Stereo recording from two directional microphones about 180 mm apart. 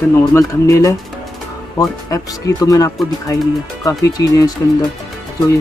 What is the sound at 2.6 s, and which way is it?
Speech, 20° left (ahead or behind).